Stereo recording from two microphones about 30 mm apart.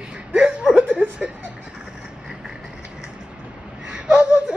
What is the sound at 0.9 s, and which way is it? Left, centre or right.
Speech, right.